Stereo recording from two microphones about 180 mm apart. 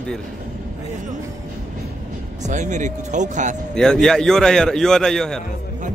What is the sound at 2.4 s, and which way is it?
Speech, 40° right (ahead or behind).